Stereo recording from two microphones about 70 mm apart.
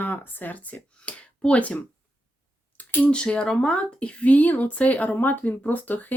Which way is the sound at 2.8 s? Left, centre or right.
Left.